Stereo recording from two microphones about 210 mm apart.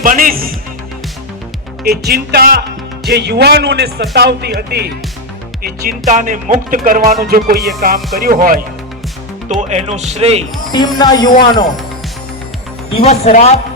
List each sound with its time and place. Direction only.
0.0 s speech: 40° right (ahead or behind)
1.8 s speech: 50° right (ahead or behind)
5.6 s speech: 45° right (ahead or behind)
9.6 s speech: 30° right (ahead or behind)
10.7 s speech: 20° left (ahead or behind)
13.0 s speech: 30° left (ahead or behind)